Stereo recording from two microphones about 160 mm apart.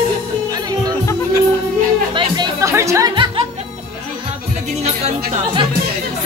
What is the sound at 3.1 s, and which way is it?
Music, 30° right (ahead or behind).